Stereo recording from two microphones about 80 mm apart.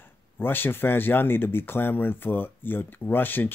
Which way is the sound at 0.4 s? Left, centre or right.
Left.